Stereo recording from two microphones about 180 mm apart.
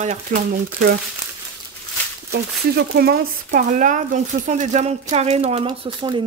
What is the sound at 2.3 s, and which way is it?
Speech, 60° right (ahead or behind).